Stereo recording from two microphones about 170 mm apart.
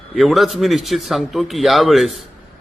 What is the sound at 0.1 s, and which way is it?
A man's voice, centre (ahead or behind).